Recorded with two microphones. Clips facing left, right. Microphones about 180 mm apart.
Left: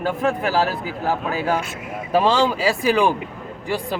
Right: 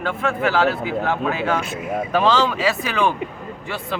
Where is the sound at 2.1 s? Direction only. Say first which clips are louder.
Left 2 dB; 35° left (ahead or behind).